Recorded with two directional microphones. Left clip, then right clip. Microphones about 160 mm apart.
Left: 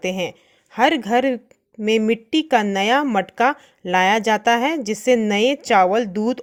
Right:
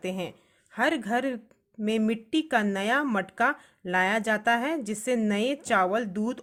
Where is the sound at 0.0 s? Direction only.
35° left (ahead or behind).